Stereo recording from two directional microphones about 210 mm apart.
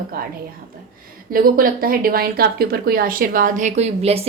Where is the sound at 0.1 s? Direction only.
45° right (ahead or behind).